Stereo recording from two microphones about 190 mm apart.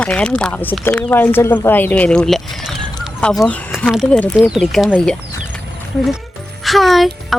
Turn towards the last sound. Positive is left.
turn(degrees=0)  # may be behind; listen again after turning